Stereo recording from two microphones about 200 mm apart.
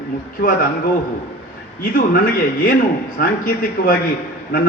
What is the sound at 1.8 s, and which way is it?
Speech, 45° left (ahead or behind).